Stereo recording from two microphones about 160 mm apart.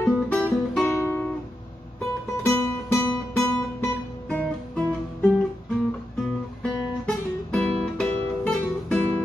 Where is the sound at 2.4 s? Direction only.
5° left (ahead or behind).